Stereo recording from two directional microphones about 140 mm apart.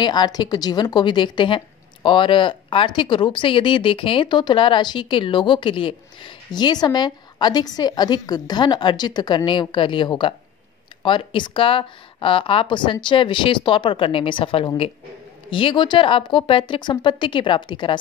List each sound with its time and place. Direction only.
0.0 s speech: 30° left (ahead or behind)